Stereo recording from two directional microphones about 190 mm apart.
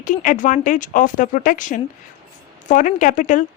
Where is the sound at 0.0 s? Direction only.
45° left (ahead or behind).